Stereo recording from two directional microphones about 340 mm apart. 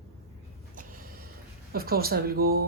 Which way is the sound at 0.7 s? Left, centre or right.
Right.